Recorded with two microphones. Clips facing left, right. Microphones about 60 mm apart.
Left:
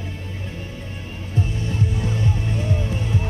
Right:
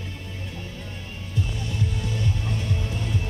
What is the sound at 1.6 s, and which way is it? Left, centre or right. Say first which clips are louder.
Music: left 5 dB; left.